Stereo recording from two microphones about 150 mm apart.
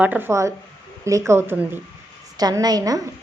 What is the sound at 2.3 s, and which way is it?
Speech, 25° right (ahead or behind).